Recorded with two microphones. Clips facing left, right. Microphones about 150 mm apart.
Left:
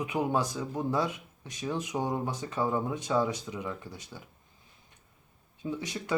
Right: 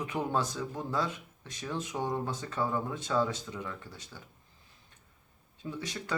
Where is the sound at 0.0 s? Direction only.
15° left (ahead or behind).